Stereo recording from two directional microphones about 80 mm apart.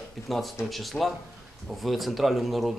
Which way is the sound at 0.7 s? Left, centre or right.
Centre.